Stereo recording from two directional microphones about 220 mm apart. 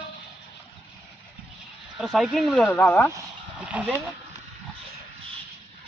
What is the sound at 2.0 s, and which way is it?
Speech, centre (ahead or behind).